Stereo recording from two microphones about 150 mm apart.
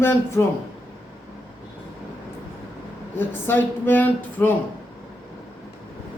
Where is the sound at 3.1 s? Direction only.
15° left (ahead or behind).